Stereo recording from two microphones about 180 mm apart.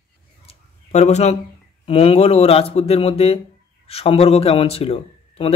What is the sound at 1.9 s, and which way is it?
A man's voice, 35° left (ahead or behind).